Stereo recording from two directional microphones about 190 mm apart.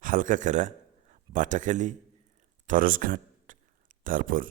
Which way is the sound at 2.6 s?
45° right (ahead or behind).